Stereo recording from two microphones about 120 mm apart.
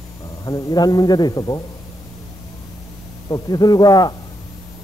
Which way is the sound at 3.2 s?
35° left (ahead or behind).